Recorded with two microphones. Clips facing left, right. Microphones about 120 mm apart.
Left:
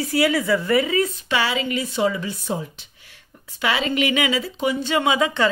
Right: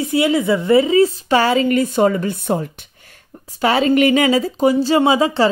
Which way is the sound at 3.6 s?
40° right (ahead or behind).